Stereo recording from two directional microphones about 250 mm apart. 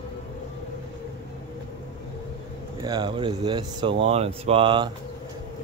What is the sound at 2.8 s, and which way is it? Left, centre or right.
Speech, centre.